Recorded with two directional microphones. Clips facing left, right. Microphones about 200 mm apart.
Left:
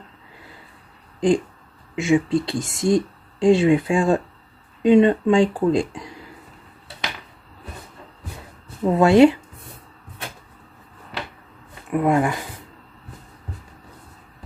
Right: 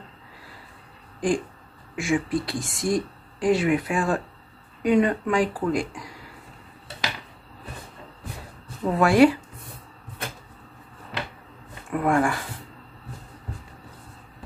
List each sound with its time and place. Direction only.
1.2 s speech: 25° left (ahead or behind)
8.8 s speech: 25° left (ahead or behind)
11.9 s speech: 20° left (ahead or behind)